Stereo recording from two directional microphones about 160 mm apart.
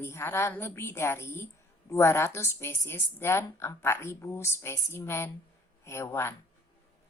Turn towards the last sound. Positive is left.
turn(degrees=15)  # may be behind; listen again after turning